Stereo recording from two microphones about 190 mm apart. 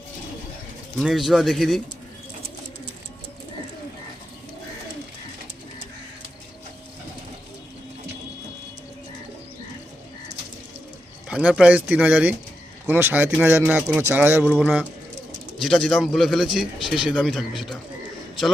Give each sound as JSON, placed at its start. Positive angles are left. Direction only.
{"t": 0.9, "sound": "speech", "side_deg": 0}
{"t": 11.3, "sound": "speech", "side_deg": -5}